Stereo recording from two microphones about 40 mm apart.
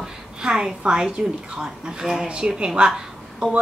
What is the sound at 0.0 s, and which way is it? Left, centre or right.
A woman's voice, centre.